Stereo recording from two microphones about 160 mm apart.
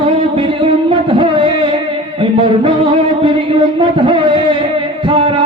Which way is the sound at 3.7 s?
30° right (ahead or behind).